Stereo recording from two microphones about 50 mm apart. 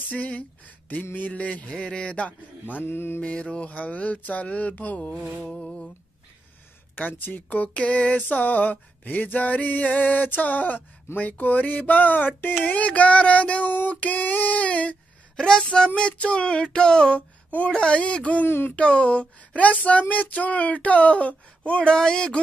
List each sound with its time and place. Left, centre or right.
0.1 s speech: left
2.8 s mantra: left
3.2 s speech: left
5.4 s a sound: centre
7.0 s speech: left
15.3 s speech: centre
21.9 s a sound: centre